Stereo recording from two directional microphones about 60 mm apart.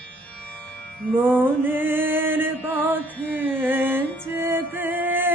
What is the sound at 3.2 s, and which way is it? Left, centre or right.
Carnatic music, right.